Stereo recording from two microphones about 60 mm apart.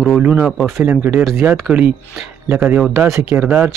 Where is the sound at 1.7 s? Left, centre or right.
Right.